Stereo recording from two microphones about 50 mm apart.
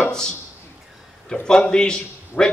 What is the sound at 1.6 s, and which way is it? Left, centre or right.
Speech, centre.